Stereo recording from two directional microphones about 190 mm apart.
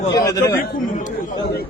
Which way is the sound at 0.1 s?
20° left (ahead or behind).